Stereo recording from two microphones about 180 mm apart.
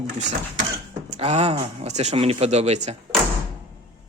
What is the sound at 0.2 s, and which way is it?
Speech, 40° right (ahead or behind).